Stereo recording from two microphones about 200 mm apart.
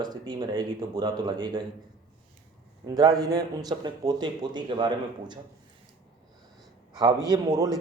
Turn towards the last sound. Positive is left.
turn(degrees=-20)  # may be behind; listen again after turning